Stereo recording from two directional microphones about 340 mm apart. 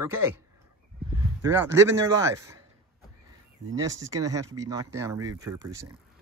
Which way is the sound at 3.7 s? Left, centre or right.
Centre.